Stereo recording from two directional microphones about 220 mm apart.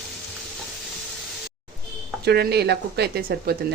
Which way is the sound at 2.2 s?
45° right (ahead or behind).